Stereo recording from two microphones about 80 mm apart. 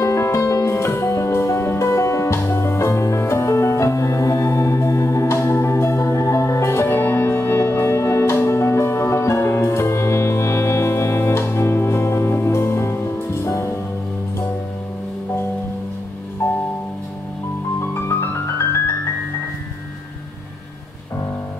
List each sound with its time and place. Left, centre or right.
0.0 s music: left
16.4 s music: left
17.7 s music: left